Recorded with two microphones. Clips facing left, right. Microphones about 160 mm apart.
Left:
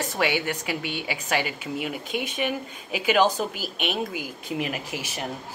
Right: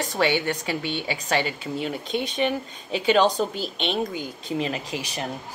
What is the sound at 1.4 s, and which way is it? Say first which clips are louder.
Speech: right 2 dB; 30° right (ahead or behind).